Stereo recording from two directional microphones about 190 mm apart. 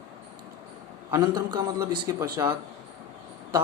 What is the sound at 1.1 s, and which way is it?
A man's voice, 20° right (ahead or behind).